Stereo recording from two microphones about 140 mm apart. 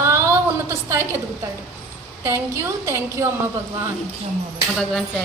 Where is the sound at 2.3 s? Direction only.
20° right (ahead or behind).